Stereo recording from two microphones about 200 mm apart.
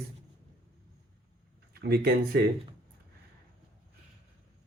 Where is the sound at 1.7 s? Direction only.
50° right (ahead or behind).